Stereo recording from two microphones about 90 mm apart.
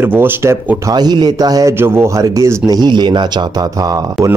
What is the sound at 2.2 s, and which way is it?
Speech, 40° right (ahead or behind).